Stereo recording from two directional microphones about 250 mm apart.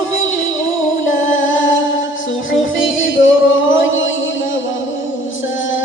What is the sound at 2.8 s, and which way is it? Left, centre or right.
Music, left.